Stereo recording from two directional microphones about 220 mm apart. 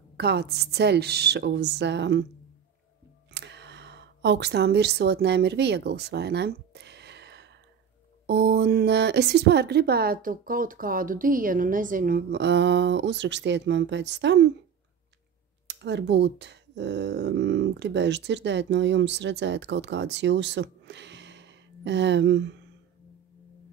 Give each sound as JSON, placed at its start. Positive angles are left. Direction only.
{"t": 0.2, "sound": "speech", "side_deg": -50}
{"t": 3.3, "sound": "a sound", "side_deg": -50}
{"t": 8.3, "sound": "speech", "side_deg": -50}
{"t": 15.6, "sound": "speech", "side_deg": -50}